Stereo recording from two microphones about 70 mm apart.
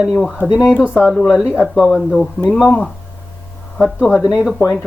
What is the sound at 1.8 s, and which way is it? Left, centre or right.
Speech, centre.